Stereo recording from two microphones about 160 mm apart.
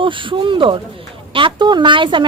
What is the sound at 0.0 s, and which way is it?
Speech, 30° right (ahead or behind).